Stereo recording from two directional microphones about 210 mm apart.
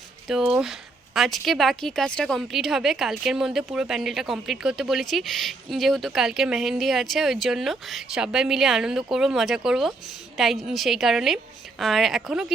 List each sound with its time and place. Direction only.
0.3 s speech: centre (ahead or behind)